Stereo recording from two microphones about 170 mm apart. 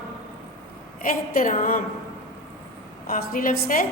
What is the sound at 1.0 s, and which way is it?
Speech, 55° left (ahead or behind).